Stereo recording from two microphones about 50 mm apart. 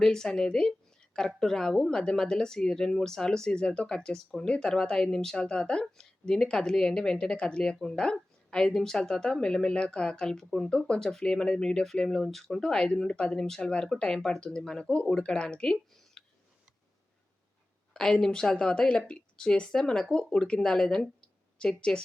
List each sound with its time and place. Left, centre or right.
0.0 s speech: centre
17.9 s speech: centre